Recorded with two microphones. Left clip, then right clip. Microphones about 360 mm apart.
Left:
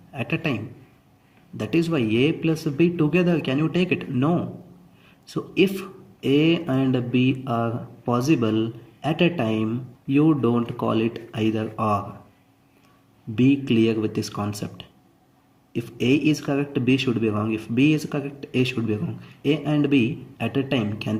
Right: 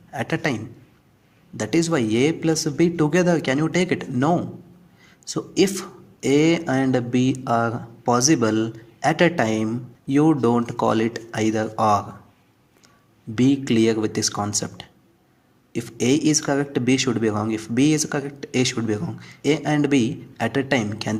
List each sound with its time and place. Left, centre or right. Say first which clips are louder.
0.1 s a man's voice: right 3 dB; right
1.5 s speech: right 2 dB; right
13.7 s speech: right 2 dB; right